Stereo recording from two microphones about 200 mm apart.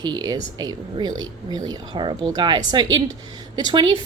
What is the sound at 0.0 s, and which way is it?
A woman's voice, 20° right (ahead or behind).